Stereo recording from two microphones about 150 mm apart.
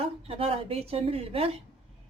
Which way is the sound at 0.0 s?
40° right (ahead or behind).